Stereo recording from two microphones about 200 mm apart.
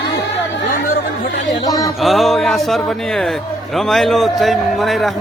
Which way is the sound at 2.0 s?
Centre (ahead or behind).